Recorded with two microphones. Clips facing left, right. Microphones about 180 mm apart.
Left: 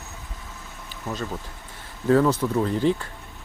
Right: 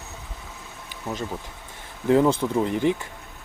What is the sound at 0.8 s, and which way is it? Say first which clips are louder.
Insect: even; 15° right (ahead or behind).